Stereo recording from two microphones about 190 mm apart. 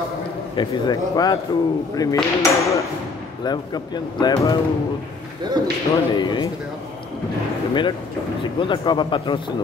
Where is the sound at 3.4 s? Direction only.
20° left (ahead or behind).